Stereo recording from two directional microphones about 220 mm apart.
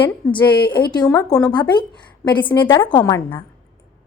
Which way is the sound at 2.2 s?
5° left (ahead or behind).